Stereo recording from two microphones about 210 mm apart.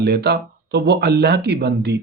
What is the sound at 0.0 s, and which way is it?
Speech, 50° right (ahead or behind).